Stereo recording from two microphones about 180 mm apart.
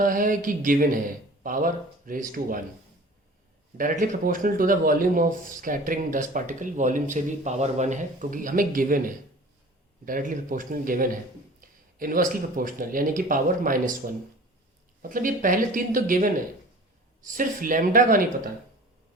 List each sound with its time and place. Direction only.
0.0 s speech: 50° right (ahead or behind)
4.0 s speech: 50° right (ahead or behind)
11.6 s a sound: 50° right (ahead or behind)
11.9 s speech: 50° right (ahead or behind)
15.1 s speech: 50° right (ahead or behind)